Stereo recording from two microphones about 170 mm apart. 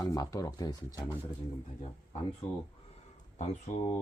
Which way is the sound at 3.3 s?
40° left (ahead or behind).